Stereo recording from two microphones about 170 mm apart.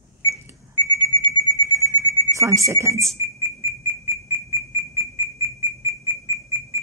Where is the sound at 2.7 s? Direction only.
15° right (ahead or behind).